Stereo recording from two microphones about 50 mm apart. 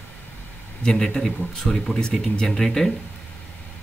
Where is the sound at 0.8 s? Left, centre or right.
Centre.